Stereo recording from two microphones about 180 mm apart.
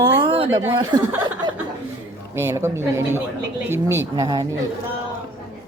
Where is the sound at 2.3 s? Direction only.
15° right (ahead or behind).